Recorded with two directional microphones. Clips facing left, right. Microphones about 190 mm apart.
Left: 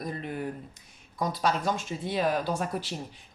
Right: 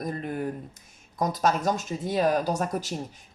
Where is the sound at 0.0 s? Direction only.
45° right (ahead or behind).